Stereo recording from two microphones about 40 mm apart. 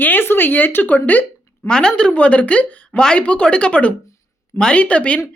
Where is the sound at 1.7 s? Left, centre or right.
Left.